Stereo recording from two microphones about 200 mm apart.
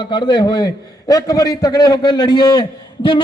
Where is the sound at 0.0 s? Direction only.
25° left (ahead or behind).